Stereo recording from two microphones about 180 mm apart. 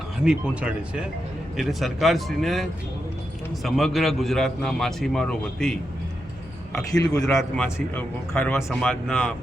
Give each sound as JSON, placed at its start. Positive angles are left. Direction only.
{"t": 0.3, "sound": "a man's voice", "side_deg": -5}
{"t": 6.9, "sound": "a man's voice", "side_deg": 20}
{"t": 7.5, "sound": "a man's voice", "side_deg": 5}